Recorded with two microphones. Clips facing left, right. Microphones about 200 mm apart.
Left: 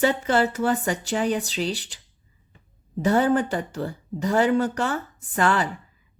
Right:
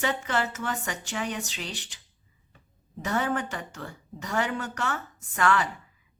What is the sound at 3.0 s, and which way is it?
Speech, 35° left (ahead or behind).